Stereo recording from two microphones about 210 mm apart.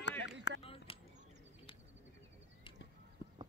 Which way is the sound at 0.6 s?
25° left (ahead or behind).